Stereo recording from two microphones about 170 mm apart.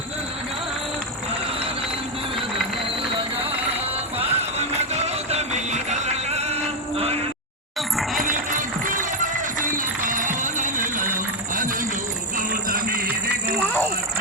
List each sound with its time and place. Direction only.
4.2 s music: 40° right (ahead or behind)
8.2 s music: 50° right (ahead or behind)